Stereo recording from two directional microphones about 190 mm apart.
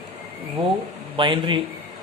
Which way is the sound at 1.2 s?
25° right (ahead or behind).